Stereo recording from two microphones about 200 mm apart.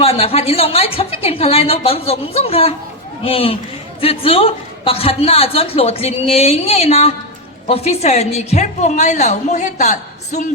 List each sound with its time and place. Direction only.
0.0 s a man's voice: 30° left (ahead or behind)